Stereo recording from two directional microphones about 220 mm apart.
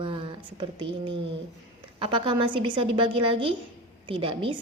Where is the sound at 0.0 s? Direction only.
20° right (ahead or behind).